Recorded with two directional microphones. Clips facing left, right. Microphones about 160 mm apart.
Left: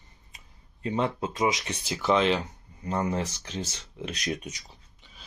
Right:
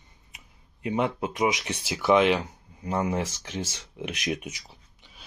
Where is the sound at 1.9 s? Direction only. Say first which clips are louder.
Right 3 dB; 15° right (ahead or behind).